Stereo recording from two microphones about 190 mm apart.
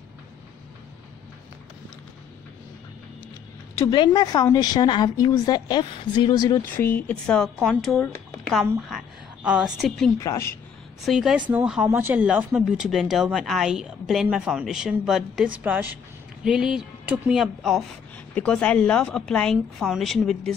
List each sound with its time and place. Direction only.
3.7 s a woman's voice: 25° left (ahead or behind)
6.6 s a woman's voice: 10° left (ahead or behind)
10.1 s speech: 15° left (ahead or behind)
11.0 s speech: centre (ahead or behind)